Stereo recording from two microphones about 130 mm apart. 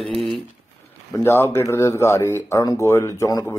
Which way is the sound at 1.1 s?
20° left (ahead or behind).